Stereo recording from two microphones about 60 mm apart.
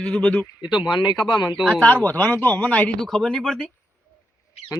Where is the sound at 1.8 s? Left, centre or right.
Left.